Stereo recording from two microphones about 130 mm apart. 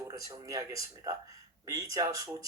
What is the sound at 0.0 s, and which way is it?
Speech, 25° right (ahead or behind).